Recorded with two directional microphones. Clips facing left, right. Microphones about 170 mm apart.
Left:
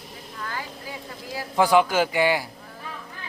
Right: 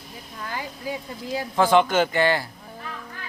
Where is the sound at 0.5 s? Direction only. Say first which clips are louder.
Right 8 dB; 20° right (ahead or behind).